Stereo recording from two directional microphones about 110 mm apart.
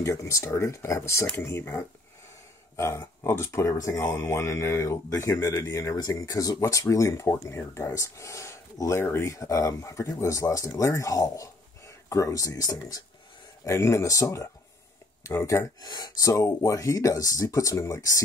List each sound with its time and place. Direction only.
0.0 s speech: 30° left (ahead or behind)